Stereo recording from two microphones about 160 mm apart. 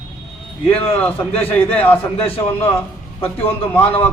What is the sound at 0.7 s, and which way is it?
A man's voice, 10° left (ahead or behind).